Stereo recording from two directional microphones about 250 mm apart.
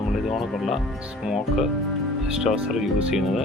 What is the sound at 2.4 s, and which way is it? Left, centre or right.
Speech, centre.